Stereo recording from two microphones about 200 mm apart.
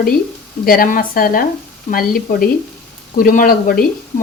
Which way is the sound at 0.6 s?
45° left (ahead or behind).